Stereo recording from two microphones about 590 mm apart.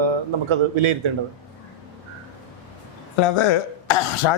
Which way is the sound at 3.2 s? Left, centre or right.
Left.